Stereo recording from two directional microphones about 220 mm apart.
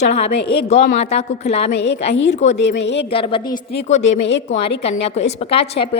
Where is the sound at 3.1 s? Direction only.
25° left (ahead or behind).